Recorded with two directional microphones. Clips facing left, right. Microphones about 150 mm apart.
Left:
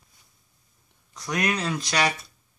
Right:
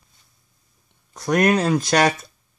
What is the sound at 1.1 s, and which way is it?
Speech, 50° right (ahead or behind).